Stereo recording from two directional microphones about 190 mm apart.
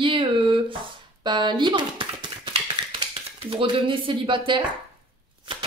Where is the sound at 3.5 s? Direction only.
25° right (ahead or behind).